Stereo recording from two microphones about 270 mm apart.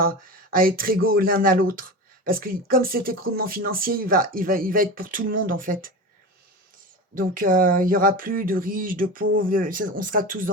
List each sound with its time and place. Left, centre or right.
0.5 s speech: right
7.1 s speech: right